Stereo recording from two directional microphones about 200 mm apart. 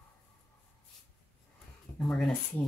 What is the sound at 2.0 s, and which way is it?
Speech, centre (ahead or behind).